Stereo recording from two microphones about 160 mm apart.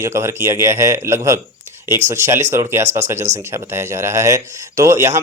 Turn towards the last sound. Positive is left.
turn(degrees=-15)  # may be behind; listen again after turning